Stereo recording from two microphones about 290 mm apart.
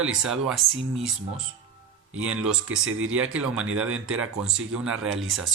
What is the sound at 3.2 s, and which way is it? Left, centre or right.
Speech, centre.